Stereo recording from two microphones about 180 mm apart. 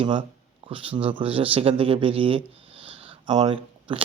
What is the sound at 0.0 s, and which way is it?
Speech, 25° right (ahead or behind).